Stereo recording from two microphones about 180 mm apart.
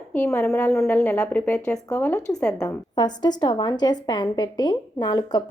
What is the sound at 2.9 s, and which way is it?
A woman's voice, 25° left (ahead or behind).